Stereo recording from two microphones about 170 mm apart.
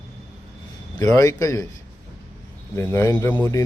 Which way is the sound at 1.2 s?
20° left (ahead or behind).